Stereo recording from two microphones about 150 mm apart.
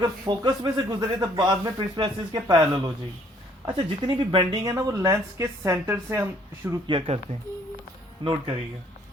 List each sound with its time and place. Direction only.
0.0 s a woman's voice: 30° right (ahead or behind); by 6.8 s 10° right (ahead or behind)
8.2 s speech: 30° right (ahead or behind)